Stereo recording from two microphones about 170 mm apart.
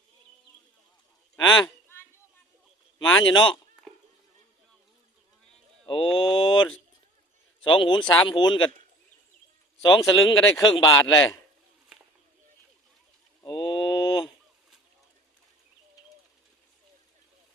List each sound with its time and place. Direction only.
1.5 s speech: 25° left (ahead or behind)
3.0 s speech: 25° left (ahead or behind)
5.8 s mantra: 30° left (ahead or behind)
7.6 s speech: 30° left (ahead or behind)
9.8 s speech: 25° left (ahead or behind)
13.4 s a sound: 25° left (ahead or behind)